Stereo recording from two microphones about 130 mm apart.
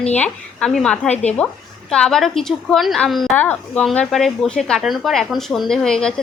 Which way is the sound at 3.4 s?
15° left (ahead or behind).